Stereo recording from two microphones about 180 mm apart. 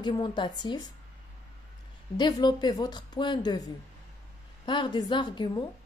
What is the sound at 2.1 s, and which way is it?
A woman's voice, 25° left (ahead or behind).